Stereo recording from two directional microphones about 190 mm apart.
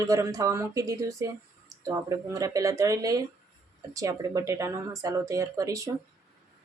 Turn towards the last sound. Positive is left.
turn(degrees=-15)  # may be behind; listen again after turning